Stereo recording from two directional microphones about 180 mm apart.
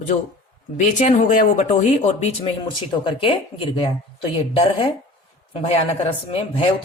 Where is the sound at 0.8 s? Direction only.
40° left (ahead or behind).